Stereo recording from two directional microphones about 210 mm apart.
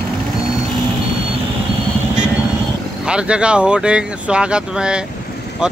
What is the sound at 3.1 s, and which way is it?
Speech, 5° right (ahead or behind).